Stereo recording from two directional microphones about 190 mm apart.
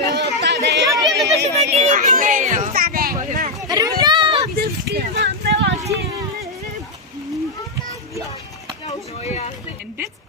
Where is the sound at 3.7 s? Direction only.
20° right (ahead or behind).